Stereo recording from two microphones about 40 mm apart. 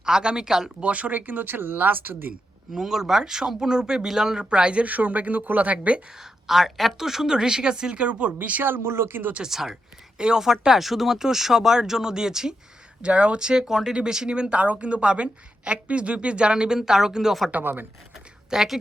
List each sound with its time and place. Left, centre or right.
0.0 s speech: centre
0.8 s speech: right
2.7 s speech: centre; by 4.9 s right
4.9 s speech: right
6.1 s speech: centre; by 8.6 s right
8.6 s speech: right
9.4 s speech: centre
13.0 s speech: right
13.5 s speech: centre
17.6 s speech: right
18.5 s speech: centre